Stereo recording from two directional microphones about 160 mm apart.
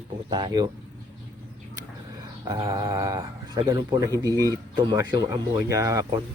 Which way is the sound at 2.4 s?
25° right (ahead or behind).